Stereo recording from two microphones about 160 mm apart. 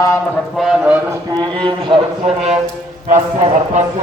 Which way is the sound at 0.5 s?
5° right (ahead or behind).